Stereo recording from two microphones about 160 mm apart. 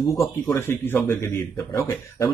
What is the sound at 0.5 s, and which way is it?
Speech, 15° left (ahead or behind).